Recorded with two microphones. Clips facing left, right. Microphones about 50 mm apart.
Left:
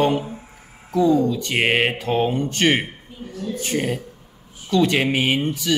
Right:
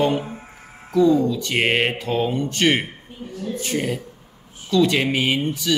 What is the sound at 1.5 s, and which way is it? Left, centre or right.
Mantra, centre.